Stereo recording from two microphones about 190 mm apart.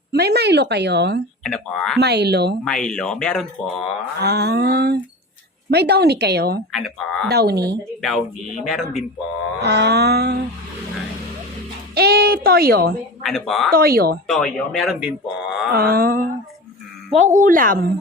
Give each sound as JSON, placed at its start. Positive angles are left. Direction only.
{"t": 0.1, "sound": "a woman's voice", "side_deg": -60}
{"t": 1.5, "sound": "speech", "side_deg": 5}
{"t": 2.0, "sound": "a woman's voice", "side_deg": -60}
{"t": 2.6, "sound": "speech", "side_deg": 5}
{"t": 4.2, "sound": "a woman's voice", "side_deg": -60}
{"t": 6.7, "sound": "speech", "side_deg": 0}
{"t": 7.3, "sound": "a woman's voice", "side_deg": -55}
{"t": 8.0, "sound": "speech", "side_deg": 0}
{"t": 9.6, "sound": "a woman's voice", "side_deg": -60}
{"t": 11.9, "sound": "a woman's voice", "side_deg": -55}
{"t": 13.2, "sound": "speech", "side_deg": 0}
{"t": 13.7, "sound": "a woman's voice", "side_deg": -50}
{"t": 14.3, "sound": "speech", "side_deg": 0}
{"t": 15.7, "sound": "a woman's voice", "side_deg": -50}